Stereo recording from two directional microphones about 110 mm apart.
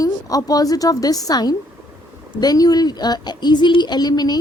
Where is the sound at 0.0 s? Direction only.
35° left (ahead or behind).